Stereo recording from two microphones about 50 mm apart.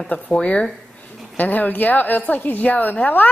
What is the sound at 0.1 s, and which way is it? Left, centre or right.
Speech, left.